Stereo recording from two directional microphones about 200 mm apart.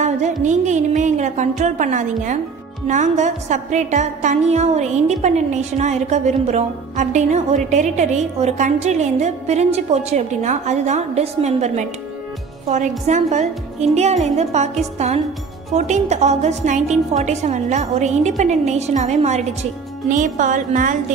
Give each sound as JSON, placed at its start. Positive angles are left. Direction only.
{"t": 0.4, "sound": "music", "side_deg": -35}